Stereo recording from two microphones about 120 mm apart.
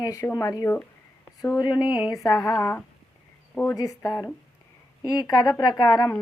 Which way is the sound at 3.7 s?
30° left (ahead or behind).